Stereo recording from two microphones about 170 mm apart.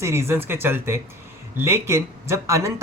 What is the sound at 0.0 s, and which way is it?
Speech, 15° right (ahead or behind).